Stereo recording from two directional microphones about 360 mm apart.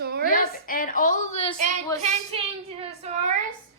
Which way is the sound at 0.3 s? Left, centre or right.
Left.